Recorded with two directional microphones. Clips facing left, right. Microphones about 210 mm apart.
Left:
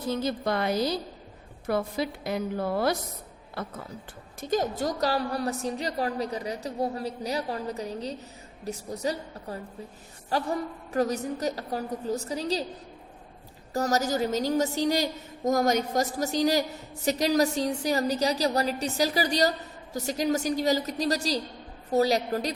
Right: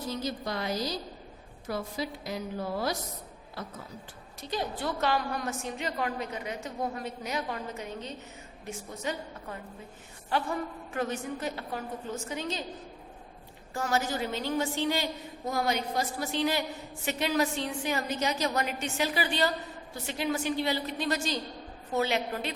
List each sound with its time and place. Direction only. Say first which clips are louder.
0.1 s a woman's voice: left 7 dB; 55° left (ahead or behind)
4.4 s a woman's voice: left 7 dB; 45° left (ahead or behind)
13.7 s a woman's voice: left 5 dB; 40° left (ahead or behind)